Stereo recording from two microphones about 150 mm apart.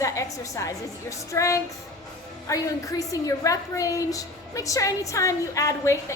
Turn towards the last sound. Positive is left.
turn(degrees=20)  # may be behind; listen again after turning